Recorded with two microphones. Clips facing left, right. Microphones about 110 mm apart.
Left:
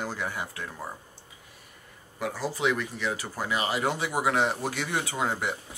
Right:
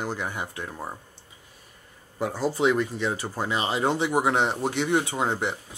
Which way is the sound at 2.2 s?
30° right (ahead or behind).